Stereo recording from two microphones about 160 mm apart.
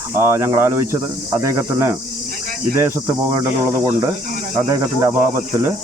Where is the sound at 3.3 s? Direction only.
15° right (ahead or behind).